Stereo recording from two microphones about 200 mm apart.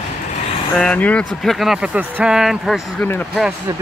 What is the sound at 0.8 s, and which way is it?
Speech, 5° left (ahead or behind).